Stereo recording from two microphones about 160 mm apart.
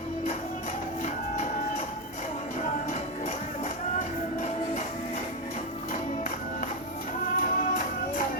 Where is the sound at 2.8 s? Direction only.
45° left (ahead or behind).